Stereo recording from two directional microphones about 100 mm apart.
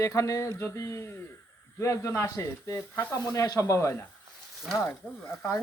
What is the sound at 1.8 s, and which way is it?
Speech, 30° left (ahead or behind).